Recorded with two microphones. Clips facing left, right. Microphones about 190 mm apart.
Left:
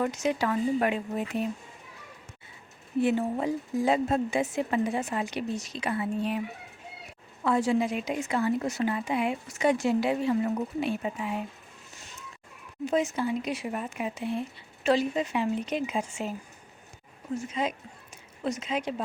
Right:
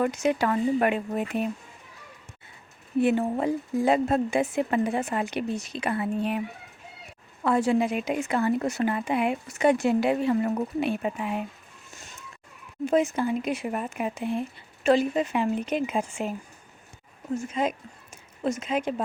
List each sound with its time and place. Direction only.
0.0 s speech: 60° right (ahead or behind)
3.0 s speech: 55° right (ahead or behind)
7.4 s speech: 55° right (ahead or behind)
12.8 s speech: 55° right (ahead or behind)
17.3 s speech: 50° right (ahead or behind)